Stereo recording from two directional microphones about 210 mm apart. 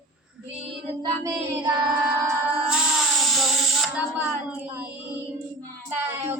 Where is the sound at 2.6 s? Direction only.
5° right (ahead or behind).